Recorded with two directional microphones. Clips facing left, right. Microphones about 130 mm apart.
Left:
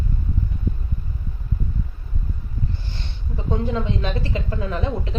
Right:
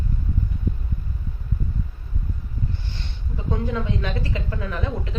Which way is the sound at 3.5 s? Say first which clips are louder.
Left 2 dB; 25° left (ahead or behind).